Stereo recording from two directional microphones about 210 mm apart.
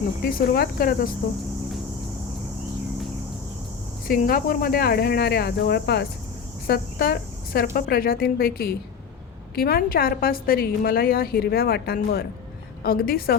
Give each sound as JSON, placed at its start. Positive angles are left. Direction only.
{"t": 0.3, "sound": "a woman's voice", "side_deg": 45}
{"t": 4.1, "sound": "a woman's voice", "side_deg": 45}